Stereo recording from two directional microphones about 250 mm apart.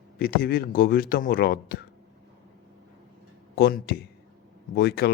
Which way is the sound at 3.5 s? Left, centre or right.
Left.